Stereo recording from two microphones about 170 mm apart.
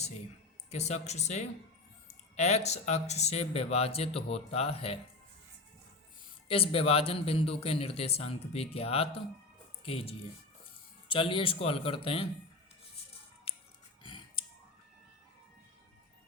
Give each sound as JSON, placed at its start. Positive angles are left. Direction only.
{"t": 0.7, "sound": "speech", "side_deg": 40}
{"t": 6.5, "sound": "speech", "side_deg": 35}
{"t": 14.0, "sound": "a sound", "side_deg": 30}